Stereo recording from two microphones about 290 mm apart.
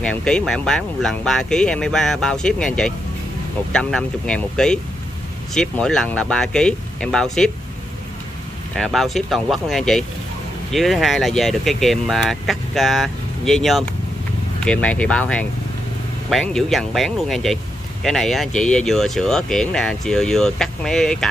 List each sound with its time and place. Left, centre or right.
0.0 s speech: centre
8.7 s speech: centre